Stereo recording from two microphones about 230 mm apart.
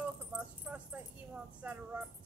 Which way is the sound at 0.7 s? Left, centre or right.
Centre.